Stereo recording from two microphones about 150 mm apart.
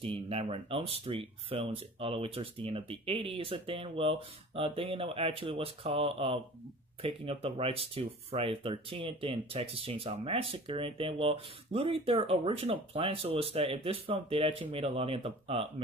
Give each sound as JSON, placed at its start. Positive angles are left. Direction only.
{"t": 0.1, "sound": "speech", "side_deg": -40}